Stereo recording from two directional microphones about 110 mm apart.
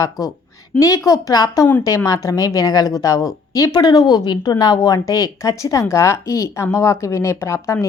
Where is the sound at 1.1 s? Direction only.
30° left (ahead or behind).